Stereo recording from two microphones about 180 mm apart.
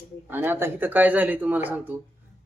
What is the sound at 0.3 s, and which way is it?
A man's voice, 10° right (ahead or behind).